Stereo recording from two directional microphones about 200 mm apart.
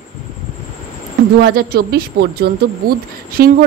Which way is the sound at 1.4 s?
50° right (ahead or behind).